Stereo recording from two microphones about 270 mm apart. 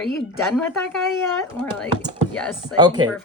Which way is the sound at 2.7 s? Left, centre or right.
Centre.